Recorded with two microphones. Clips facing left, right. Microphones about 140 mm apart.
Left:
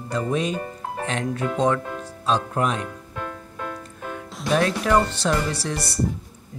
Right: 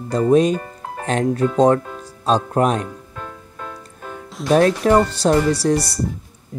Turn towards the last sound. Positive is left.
turn(degrees=-35)  # may be behind; listen again after turning